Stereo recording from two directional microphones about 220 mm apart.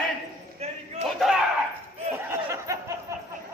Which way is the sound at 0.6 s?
30° right (ahead or behind).